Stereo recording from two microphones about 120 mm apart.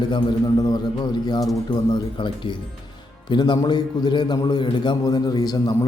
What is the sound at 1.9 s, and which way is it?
A man's voice, 40° left (ahead or behind).